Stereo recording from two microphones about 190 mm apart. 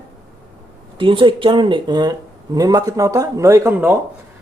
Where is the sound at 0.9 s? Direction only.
25° right (ahead or behind).